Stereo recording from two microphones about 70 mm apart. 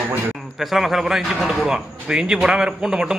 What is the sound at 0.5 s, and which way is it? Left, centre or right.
A man's voice, centre.